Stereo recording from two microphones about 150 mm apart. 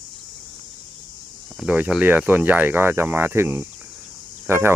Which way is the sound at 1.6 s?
5° right (ahead or behind).